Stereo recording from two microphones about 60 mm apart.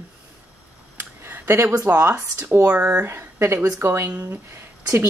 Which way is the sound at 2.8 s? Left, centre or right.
Right.